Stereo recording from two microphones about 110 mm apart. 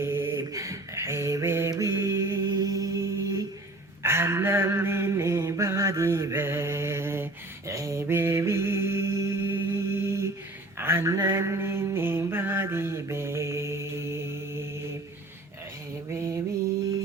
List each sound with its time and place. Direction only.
0.0 s mantra: 20° right (ahead or behind)
1.7 s a sound: 25° right (ahead or behind)
7.7 s mantra: 30° right (ahead or behind)